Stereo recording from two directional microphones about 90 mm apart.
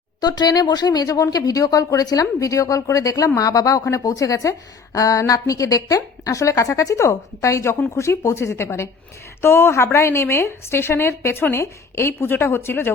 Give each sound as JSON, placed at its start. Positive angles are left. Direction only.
{"t": 0.2, "sound": "a woman's voice", "side_deg": 50}